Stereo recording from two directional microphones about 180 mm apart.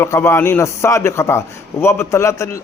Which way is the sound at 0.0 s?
15° left (ahead or behind).